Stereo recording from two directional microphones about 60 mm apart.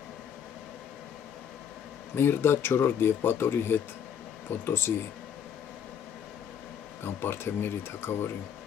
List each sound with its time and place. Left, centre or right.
2.1 s speech: left
7.2 s speech: left